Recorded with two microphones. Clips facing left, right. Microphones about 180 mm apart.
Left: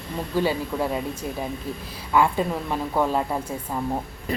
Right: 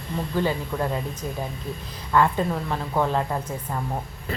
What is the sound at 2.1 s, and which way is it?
A woman's voice, 10° left (ahead or behind).